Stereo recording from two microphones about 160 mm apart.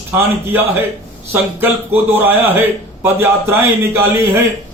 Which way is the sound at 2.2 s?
10° right (ahead or behind).